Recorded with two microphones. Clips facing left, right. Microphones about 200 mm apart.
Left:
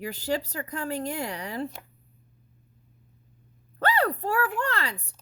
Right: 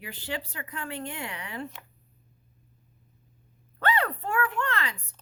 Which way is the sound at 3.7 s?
35° left (ahead or behind).